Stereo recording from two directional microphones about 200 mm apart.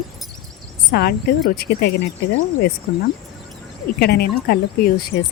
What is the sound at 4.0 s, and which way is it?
Speech, 50° left (ahead or behind).